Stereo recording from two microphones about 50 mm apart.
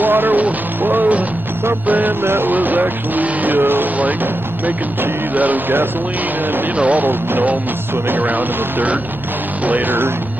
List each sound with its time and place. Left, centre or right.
0.0 s speech: right
2.2 s music: right
2.5 s speech: right
4.0 s speech: right